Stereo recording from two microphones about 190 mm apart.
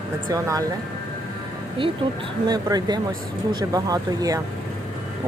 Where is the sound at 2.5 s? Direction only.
20° right (ahead or behind).